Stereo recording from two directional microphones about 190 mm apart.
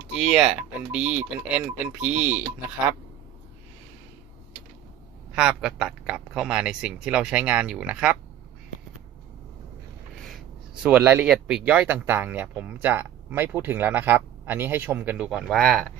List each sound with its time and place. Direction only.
0.1 s speech: 5° right (ahead or behind)
5.3 s a man's voice: 5° right (ahead or behind)
10.2 s a sound: centre (ahead or behind)
10.8 s speech: 10° right (ahead or behind)